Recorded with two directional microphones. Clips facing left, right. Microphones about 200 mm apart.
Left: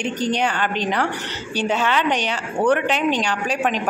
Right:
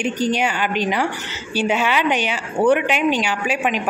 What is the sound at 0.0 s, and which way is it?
A woman's voice, 5° right (ahead or behind).